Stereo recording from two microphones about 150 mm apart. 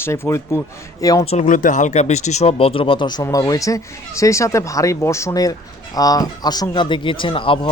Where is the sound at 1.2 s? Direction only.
55° left (ahead or behind).